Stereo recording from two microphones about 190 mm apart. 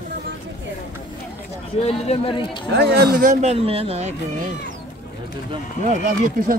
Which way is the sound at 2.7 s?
50° right (ahead or behind).